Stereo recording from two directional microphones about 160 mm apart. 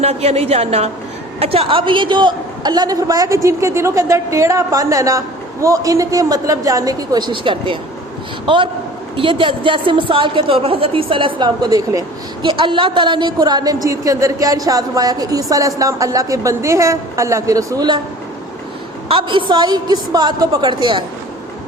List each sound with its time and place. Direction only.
0.0 s a woman's voice: 40° right (ahead or behind); by 18.0 s 25° right (ahead or behind)
19.0 s a woman's voice: 35° right (ahead or behind)